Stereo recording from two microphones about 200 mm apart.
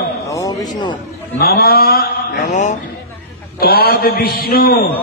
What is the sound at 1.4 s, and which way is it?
Mantra, 50° left (ahead or behind).